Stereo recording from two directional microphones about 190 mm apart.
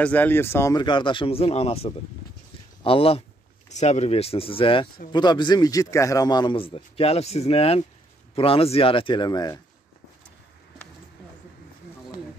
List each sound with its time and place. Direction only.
0.0 s a man's voice: 10° left (ahead or behind)